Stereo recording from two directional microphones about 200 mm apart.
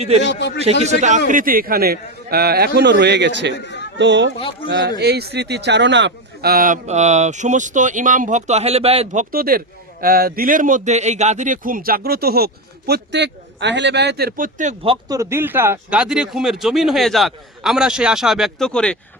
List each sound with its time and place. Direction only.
0.3 s a man's voice: 60° left (ahead or behind)
0.6 s a man's voice: 35° right (ahead or behind)
9.3 s a man's voice: 50° right (ahead or behind)
15.0 s speech: 15° right (ahead or behind); by 18.9 s 5° left (ahead or behind)